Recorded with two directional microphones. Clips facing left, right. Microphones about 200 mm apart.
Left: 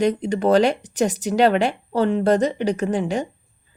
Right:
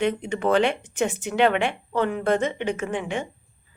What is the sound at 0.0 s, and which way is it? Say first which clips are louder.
Speech: left 4 dB; 35° left (ahead or behind).